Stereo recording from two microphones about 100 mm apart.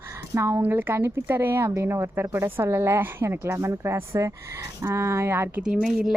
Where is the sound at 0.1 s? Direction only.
30° right (ahead or behind).